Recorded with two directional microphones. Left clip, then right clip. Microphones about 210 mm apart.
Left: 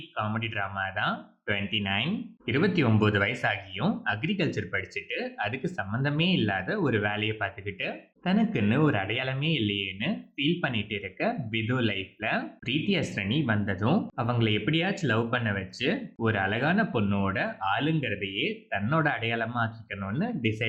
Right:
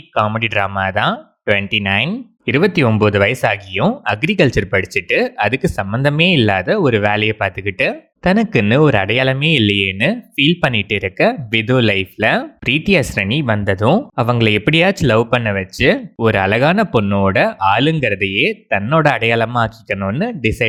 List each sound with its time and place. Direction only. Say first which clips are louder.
0.1 s speech: right 16 dB; 45° right (ahead or behind)